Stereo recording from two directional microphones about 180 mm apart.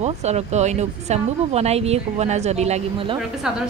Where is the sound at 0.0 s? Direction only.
35° right (ahead or behind).